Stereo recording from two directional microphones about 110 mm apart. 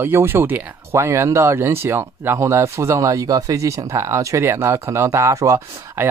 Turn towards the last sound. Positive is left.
turn(degrees=-30)  # may be behind; listen again after turning